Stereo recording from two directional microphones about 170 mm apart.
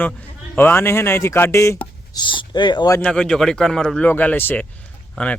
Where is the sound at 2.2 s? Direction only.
30° left (ahead or behind).